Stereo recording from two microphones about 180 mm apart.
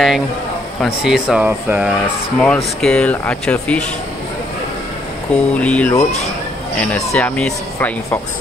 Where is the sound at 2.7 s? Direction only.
5° left (ahead or behind).